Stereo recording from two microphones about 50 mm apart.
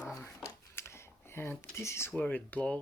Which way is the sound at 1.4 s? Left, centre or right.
Left.